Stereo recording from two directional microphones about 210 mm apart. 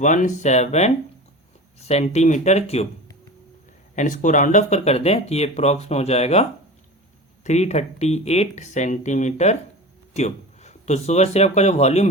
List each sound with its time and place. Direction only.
0.0 s speech: 35° left (ahead or behind)
3.9 s speech: 35° left (ahead or behind)